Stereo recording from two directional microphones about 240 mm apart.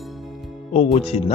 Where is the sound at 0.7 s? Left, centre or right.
Left.